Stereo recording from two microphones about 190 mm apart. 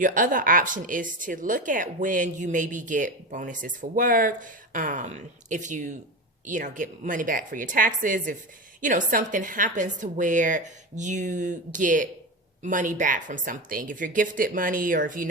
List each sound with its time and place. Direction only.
0.0 s speech: 45° right (ahead or behind)